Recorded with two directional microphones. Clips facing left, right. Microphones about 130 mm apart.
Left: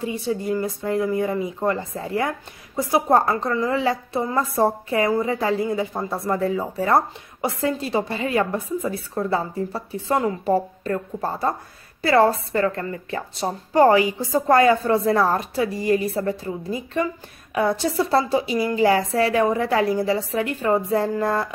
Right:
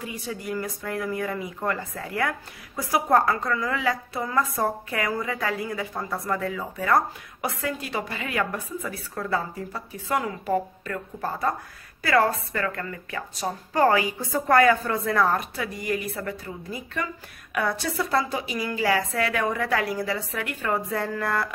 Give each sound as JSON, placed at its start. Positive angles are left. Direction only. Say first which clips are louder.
{"t": 0.0, "sound": "speech", "louder": "left 8 dB", "side_deg": 25}